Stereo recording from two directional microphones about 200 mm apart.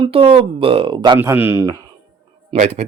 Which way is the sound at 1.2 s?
10° right (ahead or behind).